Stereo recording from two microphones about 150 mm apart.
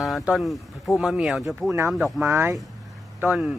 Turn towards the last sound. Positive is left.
turn(degrees=-10)  # may be behind; listen again after turning